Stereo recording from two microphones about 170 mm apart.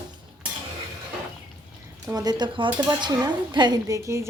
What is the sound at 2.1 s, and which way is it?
A woman's voice, 25° right (ahead or behind).